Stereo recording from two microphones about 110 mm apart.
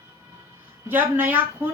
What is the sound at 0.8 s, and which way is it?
Speech, 20° right (ahead or behind).